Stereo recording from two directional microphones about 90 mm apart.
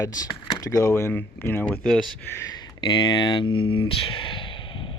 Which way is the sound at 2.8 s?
55° left (ahead or behind).